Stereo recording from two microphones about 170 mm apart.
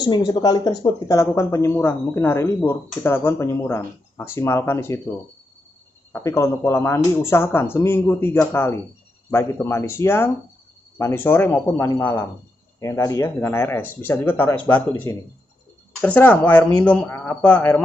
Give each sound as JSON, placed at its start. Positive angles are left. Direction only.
{"t": 0.0, "sound": "speech", "side_deg": 25}
{"t": 6.1, "sound": "speech", "side_deg": 15}